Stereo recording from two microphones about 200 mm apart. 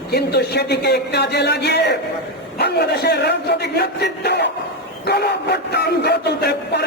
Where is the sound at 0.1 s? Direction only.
55° left (ahead or behind).